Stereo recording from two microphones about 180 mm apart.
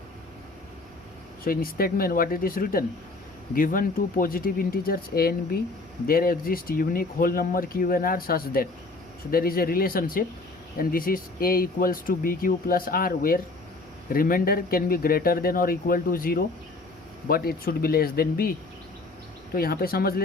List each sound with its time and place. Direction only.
1.5 s speech: 55° left (ahead or behind)
19.5 s speech: 55° left (ahead or behind)